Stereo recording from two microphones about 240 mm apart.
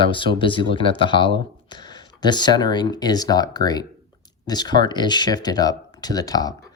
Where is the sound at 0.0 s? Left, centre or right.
Centre.